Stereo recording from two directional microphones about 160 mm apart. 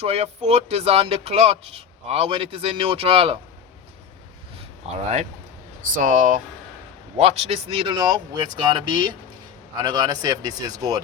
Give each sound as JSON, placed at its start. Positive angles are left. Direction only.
{"t": 0.0, "sound": "speech", "side_deg": -40}
{"t": 4.9, "sound": "speech", "side_deg": -45}
{"t": 6.0, "sound": "speech", "side_deg": -55}
{"t": 7.2, "sound": "speech", "side_deg": -40}